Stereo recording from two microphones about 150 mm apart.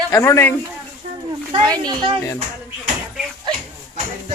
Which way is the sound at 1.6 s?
25° right (ahead or behind).